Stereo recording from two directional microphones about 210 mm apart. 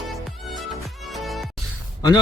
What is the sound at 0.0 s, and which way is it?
Music, centre (ahead or behind).